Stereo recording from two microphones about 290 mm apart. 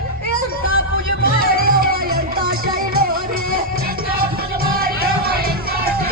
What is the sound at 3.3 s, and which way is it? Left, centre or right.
Music, right.